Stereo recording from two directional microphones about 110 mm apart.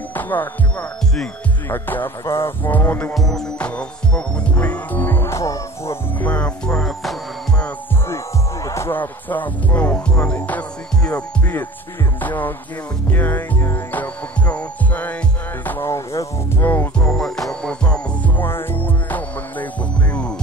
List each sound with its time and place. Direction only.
0.1 s music: 15° left (ahead or behind)
3.2 s speech: 5° left (ahead or behind); by 5.9 s 30° left (ahead or behind)
6.1 s music: 15° left (ahead or behind)
8.6 s speech: 25° left (ahead or behind)
13.1 s music: 15° left (ahead or behind)
15.6 s speech: 15° left (ahead or behind)
15.9 s music: 25° left (ahead or behind)
16.6 s speech: 15° left (ahead or behind)
17.2 s music: 5° left (ahead or behind)